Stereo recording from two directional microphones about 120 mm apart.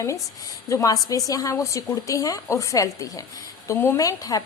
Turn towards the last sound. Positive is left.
turn(degrees=30)  # may be behind; listen again after turning